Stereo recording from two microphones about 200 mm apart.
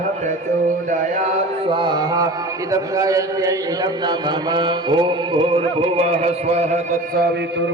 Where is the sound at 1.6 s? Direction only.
25° right (ahead or behind).